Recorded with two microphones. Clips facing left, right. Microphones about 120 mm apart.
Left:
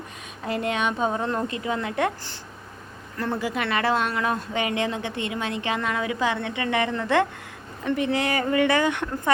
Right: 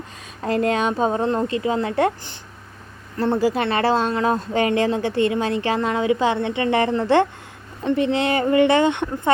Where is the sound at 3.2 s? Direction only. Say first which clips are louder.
Right 7 dB; 35° right (ahead or behind).